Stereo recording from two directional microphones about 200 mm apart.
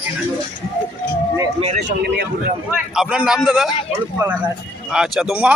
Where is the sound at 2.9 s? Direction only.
5° right (ahead or behind).